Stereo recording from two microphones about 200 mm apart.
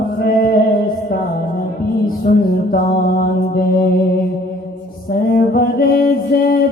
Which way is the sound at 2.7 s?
50° left (ahead or behind).